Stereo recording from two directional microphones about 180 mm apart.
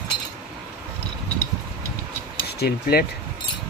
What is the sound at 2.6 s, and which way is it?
Speech, 60° left (ahead or behind).